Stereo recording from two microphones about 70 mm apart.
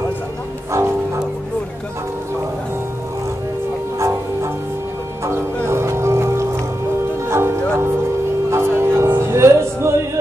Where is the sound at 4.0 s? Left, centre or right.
Right.